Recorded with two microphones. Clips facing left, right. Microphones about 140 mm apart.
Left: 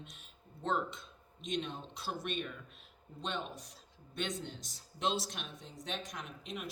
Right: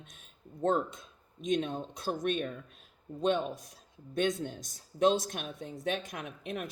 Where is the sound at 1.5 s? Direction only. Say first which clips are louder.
Right 8 dB; 50° right (ahead or behind).